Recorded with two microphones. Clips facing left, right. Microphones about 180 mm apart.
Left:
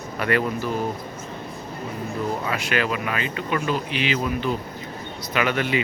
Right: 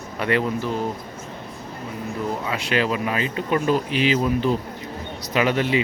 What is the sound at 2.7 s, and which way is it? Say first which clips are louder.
Speech: right 4 dB; 30° right (ahead or behind).